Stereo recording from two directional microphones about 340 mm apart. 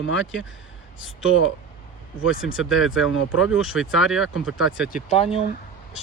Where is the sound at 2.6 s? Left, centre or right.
Centre.